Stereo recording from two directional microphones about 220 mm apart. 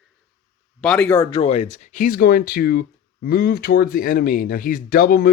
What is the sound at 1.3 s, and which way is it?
Speech, 25° left (ahead or behind).